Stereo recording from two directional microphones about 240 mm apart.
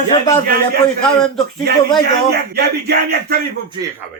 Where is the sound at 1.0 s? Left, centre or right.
Centre.